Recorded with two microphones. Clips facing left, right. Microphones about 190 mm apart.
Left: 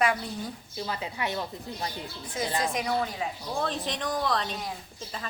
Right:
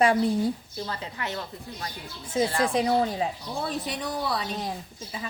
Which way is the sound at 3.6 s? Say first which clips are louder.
Even; 10° right (ahead or behind).